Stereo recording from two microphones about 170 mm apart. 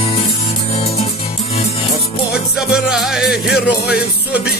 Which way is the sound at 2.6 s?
5° right (ahead or behind).